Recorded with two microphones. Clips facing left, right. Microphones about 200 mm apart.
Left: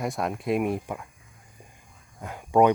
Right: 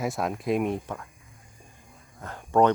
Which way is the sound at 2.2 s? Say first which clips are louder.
Left 1 dB; 10° left (ahead or behind).